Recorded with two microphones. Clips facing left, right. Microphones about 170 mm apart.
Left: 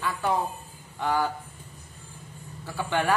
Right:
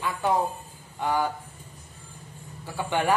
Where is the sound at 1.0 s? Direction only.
15° right (ahead or behind).